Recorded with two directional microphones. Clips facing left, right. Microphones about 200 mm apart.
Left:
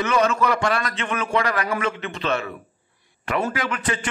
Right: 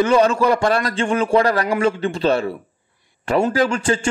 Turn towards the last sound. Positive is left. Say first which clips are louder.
# right 8 dB
turn(degrees=-30)  # may be behind; listen again after turning